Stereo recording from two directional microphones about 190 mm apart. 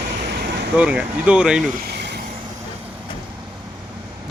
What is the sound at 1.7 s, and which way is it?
Vehicle, 60° right (ahead or behind).